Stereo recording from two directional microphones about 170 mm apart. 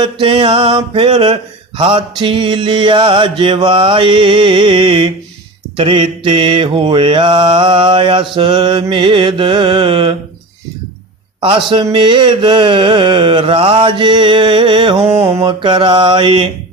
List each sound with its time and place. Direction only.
0.0 s mantra: 30° right (ahead or behind)
11.3 s mantra: 30° right (ahead or behind)